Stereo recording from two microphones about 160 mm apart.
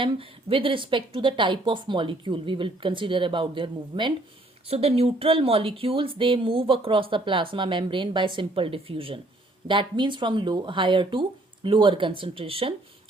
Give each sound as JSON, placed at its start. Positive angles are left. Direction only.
{"t": 0.0, "sound": "speech", "side_deg": -35}